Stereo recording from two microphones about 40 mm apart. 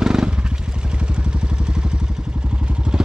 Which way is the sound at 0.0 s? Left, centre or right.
Centre.